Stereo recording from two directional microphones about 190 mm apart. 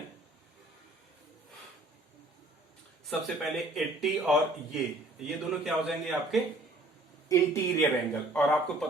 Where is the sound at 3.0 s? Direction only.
Centre (ahead or behind).